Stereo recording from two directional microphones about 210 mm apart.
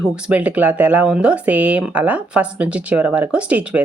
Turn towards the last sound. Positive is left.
turn(degrees=-5)  # may be behind; listen again after turning